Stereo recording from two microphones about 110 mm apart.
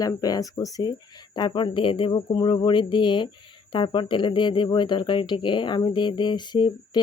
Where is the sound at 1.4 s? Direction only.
45° left (ahead or behind).